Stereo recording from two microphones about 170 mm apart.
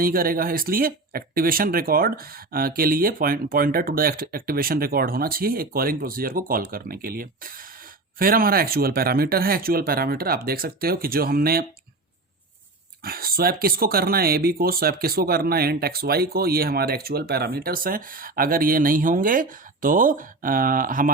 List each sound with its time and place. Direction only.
0.0 s speech: 60° right (ahead or behind)
13.1 s speech: 60° right (ahead or behind)